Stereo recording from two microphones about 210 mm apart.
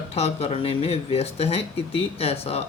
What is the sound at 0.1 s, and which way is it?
A man's voice, 30° left (ahead or behind).